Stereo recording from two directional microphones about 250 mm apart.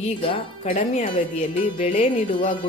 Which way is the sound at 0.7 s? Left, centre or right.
Left.